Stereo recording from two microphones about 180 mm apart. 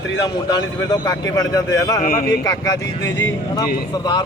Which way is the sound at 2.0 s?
50° left (ahead or behind).